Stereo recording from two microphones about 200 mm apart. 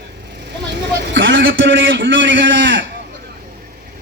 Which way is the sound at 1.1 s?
70° right (ahead or behind).